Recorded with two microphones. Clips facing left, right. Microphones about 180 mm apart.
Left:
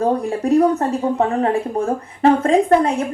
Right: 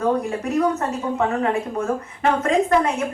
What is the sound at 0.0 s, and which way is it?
Speech, 35° left (ahead or behind).